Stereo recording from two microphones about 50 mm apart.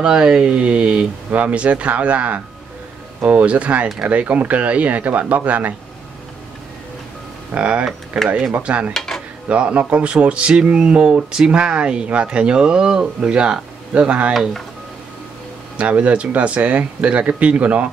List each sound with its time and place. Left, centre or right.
0.0 s speech: centre
7.5 s speech: right
8.9 s dishes: centre
9.5 s speech: right
15.8 s speech: right